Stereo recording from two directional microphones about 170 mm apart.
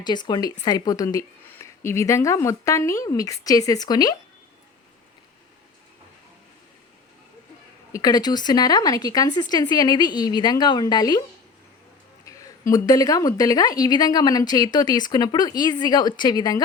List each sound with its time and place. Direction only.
0.0 s a woman's voice: 25° left (ahead or behind)
7.9 s a woman's voice: 20° left (ahead or behind)
12.2 s a woman's voice: 20° left (ahead or behind)